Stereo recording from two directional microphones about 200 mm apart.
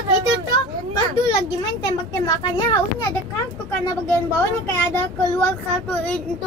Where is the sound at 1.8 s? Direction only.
15° left (ahead or behind).